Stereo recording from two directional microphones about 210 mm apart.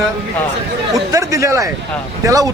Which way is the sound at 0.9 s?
15° right (ahead or behind).